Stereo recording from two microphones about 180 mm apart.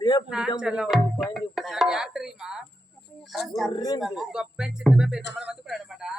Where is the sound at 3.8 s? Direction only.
20° left (ahead or behind).